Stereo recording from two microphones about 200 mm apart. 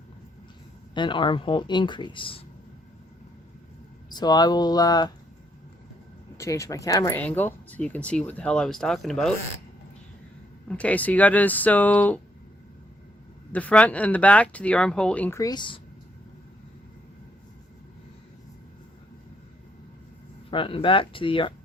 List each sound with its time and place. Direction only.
0.9 s speech: 25° left (ahead or behind)
4.1 s speech: 20° left (ahead or behind)
6.3 s speech: 15° left (ahead or behind)
10.7 s speech: 5° left (ahead or behind)
13.5 s speech: 5° left (ahead or behind); by 15.8 s 25° left (ahead or behind)
20.5 s speech: 25° left (ahead or behind)